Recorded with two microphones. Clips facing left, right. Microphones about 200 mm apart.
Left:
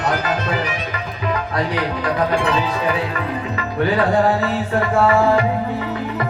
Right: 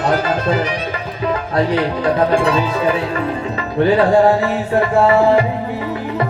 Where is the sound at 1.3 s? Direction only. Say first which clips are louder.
Right 5 dB; 30° right (ahead or behind).